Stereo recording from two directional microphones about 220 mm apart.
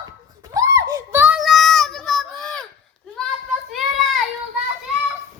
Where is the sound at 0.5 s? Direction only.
15° right (ahead or behind); by 2.6 s 5° left (ahead or behind).